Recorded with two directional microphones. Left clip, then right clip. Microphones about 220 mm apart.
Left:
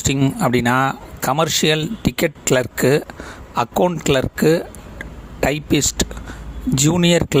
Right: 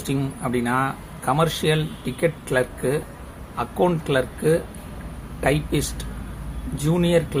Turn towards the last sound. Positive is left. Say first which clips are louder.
# left 4 dB
turn(degrees=50)  # may be behind; listen again after turning